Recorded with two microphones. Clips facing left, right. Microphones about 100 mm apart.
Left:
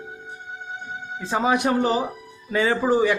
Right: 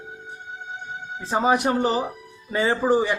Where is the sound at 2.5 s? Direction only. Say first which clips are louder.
Left 1 dB; 25° right (ahead or behind).